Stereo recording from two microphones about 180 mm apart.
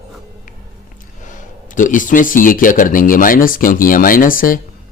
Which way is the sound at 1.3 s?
45° left (ahead or behind).